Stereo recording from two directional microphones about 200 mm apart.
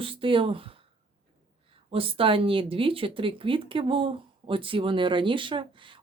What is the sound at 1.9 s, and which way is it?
Speech, 25° right (ahead or behind).